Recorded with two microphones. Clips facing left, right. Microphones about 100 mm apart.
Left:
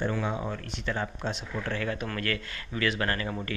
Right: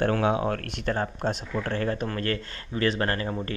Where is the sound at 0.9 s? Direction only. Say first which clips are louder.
Right 5 dB; 45° right (ahead or behind).